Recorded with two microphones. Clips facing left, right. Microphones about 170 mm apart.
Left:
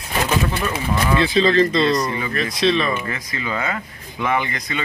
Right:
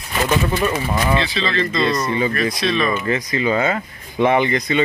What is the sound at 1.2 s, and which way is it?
Speech, 50° left (ahead or behind).